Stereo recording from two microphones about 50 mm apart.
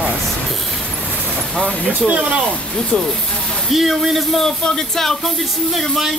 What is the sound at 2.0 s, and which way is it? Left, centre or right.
Speech, right.